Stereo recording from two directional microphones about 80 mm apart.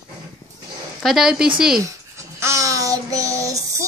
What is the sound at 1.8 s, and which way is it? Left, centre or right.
Child singing, right.